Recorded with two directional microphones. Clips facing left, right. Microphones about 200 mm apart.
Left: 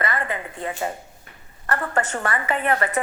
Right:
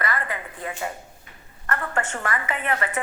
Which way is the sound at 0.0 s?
25° left (ahead or behind).